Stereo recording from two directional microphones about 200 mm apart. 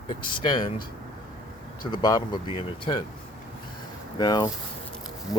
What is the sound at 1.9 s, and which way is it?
Speech, 20° left (ahead or behind).